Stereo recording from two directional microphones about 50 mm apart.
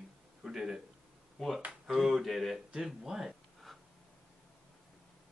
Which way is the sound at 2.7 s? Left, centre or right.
Centre.